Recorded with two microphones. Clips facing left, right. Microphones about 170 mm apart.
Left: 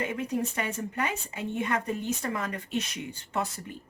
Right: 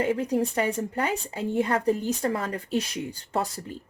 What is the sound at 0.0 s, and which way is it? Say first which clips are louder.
Speech: right 6 dB; 35° right (ahead or behind).